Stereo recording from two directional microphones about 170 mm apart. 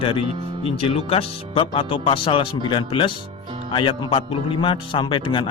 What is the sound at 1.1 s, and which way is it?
Speech, 30° left (ahead or behind).